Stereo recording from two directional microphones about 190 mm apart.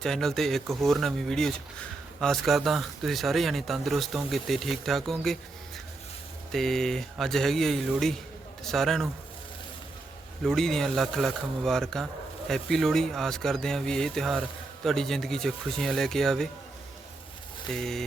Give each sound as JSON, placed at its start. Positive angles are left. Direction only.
{"t": 0.0, "sound": "speech", "side_deg": 0}
{"t": 6.5, "sound": "speech", "side_deg": 0}
{"t": 10.4, "sound": "speech", "side_deg": 0}
{"t": 17.7, "sound": "speech", "side_deg": 0}